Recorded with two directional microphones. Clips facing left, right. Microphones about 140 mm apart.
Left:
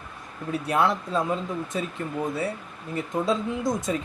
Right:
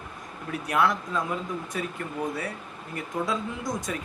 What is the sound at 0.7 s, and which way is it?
Speech, 25° left (ahead or behind).